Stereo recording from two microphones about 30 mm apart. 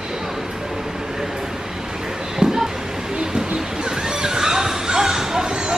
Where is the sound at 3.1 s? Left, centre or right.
Right.